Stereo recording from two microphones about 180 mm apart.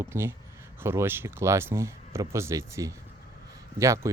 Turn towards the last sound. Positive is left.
turn(degrees=-15)  # may be behind; listen again after turning